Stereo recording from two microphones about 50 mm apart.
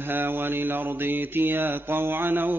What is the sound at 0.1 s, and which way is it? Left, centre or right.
Mantra, right.